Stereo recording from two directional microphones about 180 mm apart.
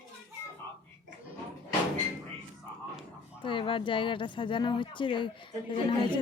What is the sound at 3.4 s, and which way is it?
Speech, 30° left (ahead or behind).